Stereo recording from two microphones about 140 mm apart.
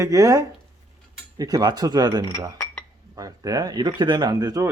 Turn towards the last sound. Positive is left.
turn(degrees=-25)  # may be behind; listen again after turning